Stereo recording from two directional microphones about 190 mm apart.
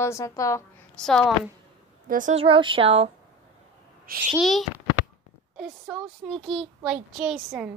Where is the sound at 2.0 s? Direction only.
45° right (ahead or behind).